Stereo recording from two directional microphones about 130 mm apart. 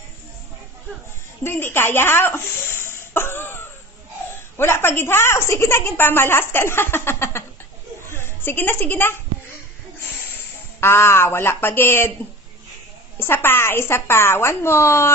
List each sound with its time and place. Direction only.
1.4 s a sound: 20° left (ahead or behind)
4.6 s a woman's voice: 20° left (ahead or behind)
10.3 s speech: 20° left (ahead or behind)
13.2 s a woman's voice: 15° left (ahead or behind)